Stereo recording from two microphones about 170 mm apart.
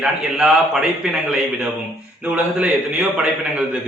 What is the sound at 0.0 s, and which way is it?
A man's voice, centre (ahead or behind).